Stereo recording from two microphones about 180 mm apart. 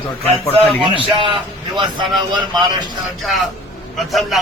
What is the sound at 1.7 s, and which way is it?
Speech, 25° right (ahead or behind).